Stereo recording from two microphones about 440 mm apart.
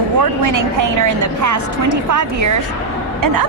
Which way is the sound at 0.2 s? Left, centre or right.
Right.